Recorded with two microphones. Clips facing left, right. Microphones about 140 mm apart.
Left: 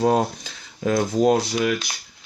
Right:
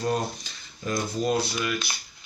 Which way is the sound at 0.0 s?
90° left.